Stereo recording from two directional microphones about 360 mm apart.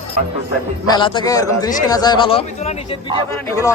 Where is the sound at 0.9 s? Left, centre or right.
Centre.